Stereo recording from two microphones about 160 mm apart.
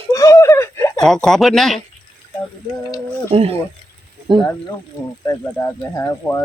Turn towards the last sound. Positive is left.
turn(degrees=15)  # may be behind; listen again after turning